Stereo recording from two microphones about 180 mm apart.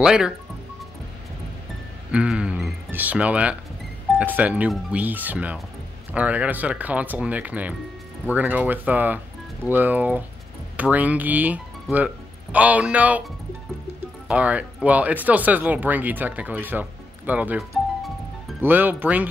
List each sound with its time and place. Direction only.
0.0 s speech: 5° right (ahead or behind)
2.0 s a sound: 5° right (ahead or behind)
4.2 s speech: 10° right (ahead or behind)
14.2 s speech: 5° right (ahead or behind)
17.3 s music: 10° right (ahead or behind)
18.6 s speech: 10° right (ahead or behind)